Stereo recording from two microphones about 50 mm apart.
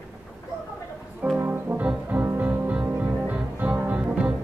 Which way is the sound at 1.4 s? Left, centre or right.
Right.